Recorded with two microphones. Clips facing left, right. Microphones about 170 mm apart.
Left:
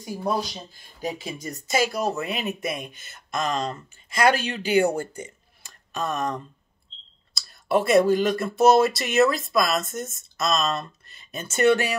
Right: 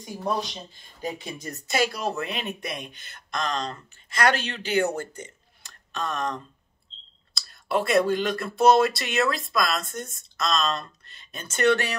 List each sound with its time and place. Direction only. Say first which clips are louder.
0.0 s speech: left 2 dB; 5° left (ahead or behind)
7.3 s speech: left 3 dB; centre (ahead or behind)